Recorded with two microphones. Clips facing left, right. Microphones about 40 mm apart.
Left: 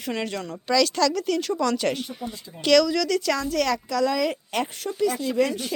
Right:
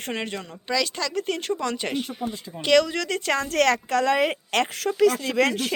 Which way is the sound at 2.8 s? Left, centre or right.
Right.